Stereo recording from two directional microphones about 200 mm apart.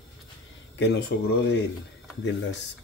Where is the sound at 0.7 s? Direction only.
60° left (ahead or behind).